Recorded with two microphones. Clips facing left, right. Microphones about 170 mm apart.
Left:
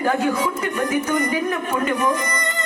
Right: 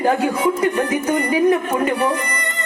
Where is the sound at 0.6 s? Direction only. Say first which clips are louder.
Right 4 dB; 30° right (ahead or behind).